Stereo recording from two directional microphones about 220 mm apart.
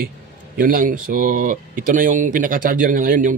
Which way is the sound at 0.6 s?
40° right (ahead or behind).